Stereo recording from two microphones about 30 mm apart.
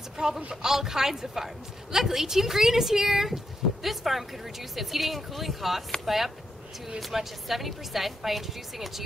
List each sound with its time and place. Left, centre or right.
0.2 s speech: right
0.6 s speech: centre
3.8 s speech: centre